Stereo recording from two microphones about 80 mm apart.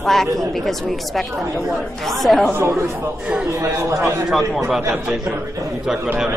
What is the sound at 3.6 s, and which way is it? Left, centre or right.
Speech, right.